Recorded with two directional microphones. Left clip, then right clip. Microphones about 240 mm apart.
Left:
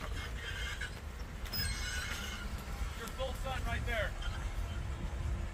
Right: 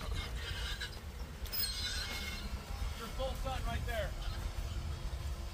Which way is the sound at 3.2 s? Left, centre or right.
Centre.